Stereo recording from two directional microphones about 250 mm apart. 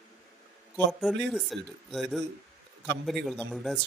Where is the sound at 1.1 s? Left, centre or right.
Centre.